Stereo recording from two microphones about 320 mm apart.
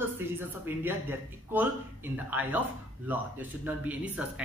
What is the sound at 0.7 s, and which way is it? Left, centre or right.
A man's voice, centre.